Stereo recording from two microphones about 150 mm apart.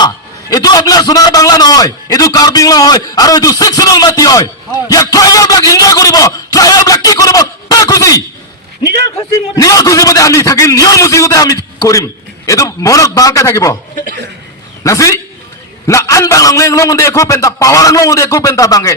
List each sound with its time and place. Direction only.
0.5 s a man's voice: 25° left (ahead or behind)
14.8 s a man's voice: 20° left (ahead or behind)